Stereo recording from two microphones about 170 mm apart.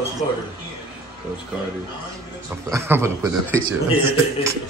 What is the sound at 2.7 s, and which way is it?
A man's voice, 15° right (ahead or behind).